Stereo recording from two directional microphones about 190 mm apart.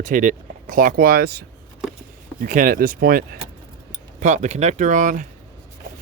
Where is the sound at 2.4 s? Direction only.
45° right (ahead or behind).